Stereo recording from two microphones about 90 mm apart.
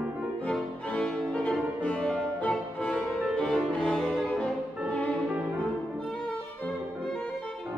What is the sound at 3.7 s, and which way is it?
Music, 10° left (ahead or behind).